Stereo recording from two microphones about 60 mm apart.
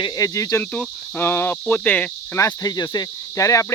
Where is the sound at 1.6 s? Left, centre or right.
Left.